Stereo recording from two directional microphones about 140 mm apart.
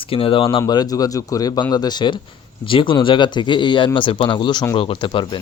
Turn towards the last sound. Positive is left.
turn(degrees=35)  # may be behind; listen again after turning